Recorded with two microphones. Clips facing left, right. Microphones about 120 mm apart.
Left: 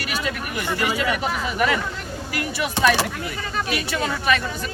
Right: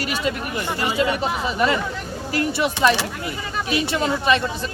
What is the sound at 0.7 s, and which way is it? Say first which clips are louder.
Speech: right 1 dB; 25° right (ahead or behind).